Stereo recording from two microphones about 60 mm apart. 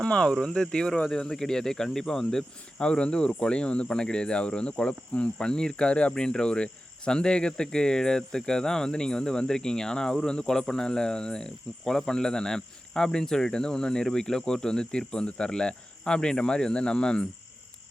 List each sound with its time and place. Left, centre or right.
0.0 s speech: centre